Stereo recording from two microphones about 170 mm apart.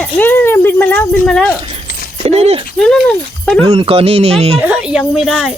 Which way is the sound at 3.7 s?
35° right (ahead or behind).